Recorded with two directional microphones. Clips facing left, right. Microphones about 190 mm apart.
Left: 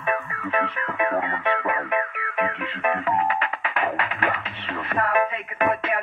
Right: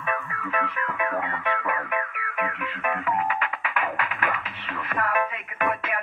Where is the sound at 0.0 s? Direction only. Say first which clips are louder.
Left 4 dB; 25° left (ahead or behind).